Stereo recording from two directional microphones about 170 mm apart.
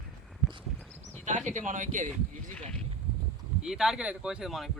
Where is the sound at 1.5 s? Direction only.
50° right (ahead or behind).